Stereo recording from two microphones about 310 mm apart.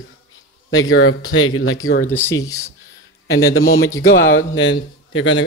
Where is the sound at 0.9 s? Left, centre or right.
Left.